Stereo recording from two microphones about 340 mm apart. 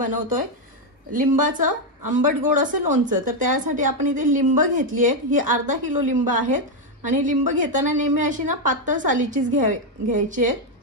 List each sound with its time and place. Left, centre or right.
0.0 s a woman's voice: right